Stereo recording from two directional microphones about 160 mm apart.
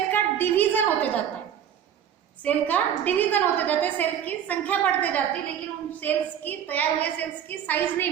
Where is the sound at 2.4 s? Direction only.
10° left (ahead or behind).